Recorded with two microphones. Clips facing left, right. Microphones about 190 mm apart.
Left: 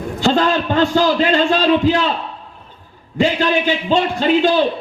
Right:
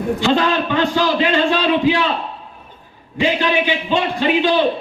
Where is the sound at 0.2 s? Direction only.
45° left (ahead or behind).